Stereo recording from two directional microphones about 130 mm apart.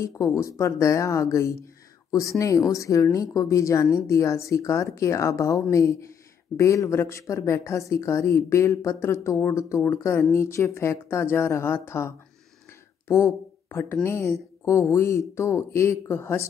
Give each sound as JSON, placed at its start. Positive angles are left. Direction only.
{"t": 0.0, "sound": "speech", "side_deg": 20}
{"t": 13.1, "sound": "speech", "side_deg": 20}